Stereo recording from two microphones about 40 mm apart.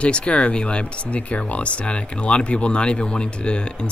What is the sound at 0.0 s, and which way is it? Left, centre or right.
Speech, left.